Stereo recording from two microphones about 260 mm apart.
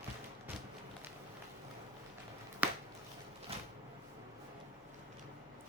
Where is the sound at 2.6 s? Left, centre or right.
Centre.